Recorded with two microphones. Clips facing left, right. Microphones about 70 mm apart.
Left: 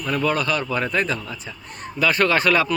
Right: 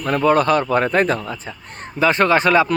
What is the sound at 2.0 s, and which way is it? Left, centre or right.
Speech, right.